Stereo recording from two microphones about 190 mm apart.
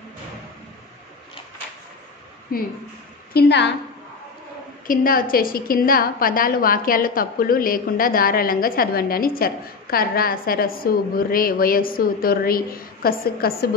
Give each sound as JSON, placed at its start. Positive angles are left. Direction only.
{"t": 2.5, "sound": "a woman's voice", "side_deg": 50}
{"t": 3.3, "sound": "a woman's voice", "side_deg": 60}
{"t": 4.8, "sound": "a woman's voice", "side_deg": 50}